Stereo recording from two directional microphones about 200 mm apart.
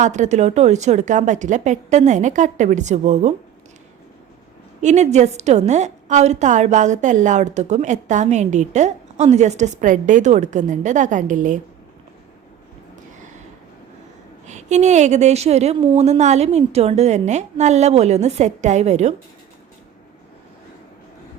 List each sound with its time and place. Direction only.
0.0 s a woman's voice: 35° right (ahead or behind)
4.8 s a woman's voice: 35° right (ahead or behind)
14.4 s a woman's voice: 35° right (ahead or behind)